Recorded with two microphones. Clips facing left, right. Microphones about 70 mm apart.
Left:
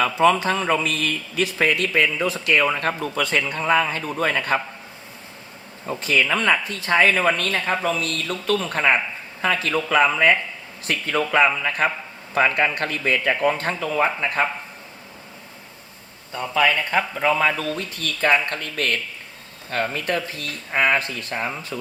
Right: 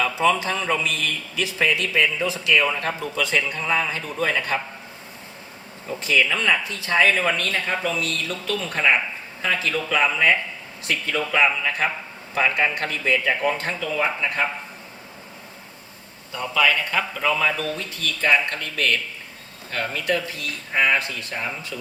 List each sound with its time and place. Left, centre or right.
0.0 s a man's voice: left
6.0 s a man's voice: left
16.6 s a man's voice: left